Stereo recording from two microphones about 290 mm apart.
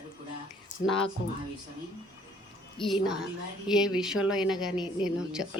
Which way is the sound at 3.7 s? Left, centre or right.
Centre.